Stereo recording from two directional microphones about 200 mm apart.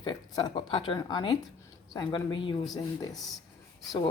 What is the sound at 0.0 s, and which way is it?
Speech, 25° left (ahead or behind).